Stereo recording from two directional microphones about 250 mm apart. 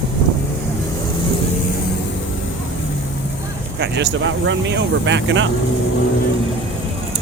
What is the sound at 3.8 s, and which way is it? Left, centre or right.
Speech, right.